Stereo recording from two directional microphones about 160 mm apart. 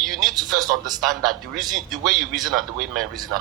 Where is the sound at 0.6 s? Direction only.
25° right (ahead or behind).